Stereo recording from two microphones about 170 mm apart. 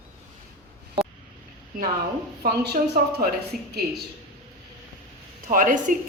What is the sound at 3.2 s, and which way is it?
Speech, 65° right (ahead or behind).